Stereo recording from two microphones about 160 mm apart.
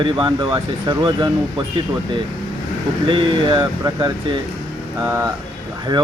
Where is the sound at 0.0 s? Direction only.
30° right (ahead or behind).